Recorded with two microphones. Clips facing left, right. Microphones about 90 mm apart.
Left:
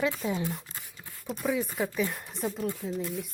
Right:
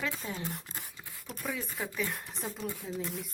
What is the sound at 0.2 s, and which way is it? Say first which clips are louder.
Speech: left 7 dB; 10° left (ahead or behind).